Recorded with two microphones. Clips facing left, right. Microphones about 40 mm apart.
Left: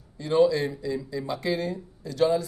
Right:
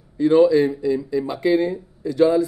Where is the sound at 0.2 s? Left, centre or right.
Right.